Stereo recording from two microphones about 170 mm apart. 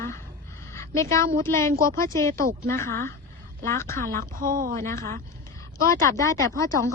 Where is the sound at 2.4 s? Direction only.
55° right (ahead or behind).